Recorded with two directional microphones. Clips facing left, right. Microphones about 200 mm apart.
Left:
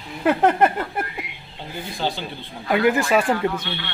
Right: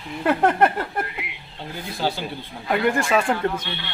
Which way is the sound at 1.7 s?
5° right (ahead or behind).